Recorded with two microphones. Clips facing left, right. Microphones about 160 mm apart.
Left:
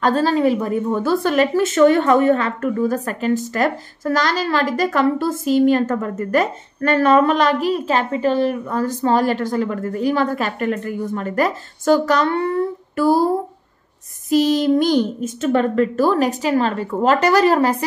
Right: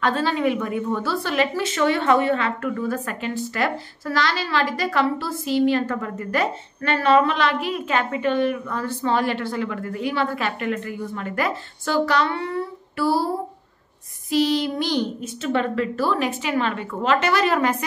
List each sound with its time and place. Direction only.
0.0 s a woman's voice: 40° left (ahead or behind)
14.3 s a woman's voice: 45° left (ahead or behind)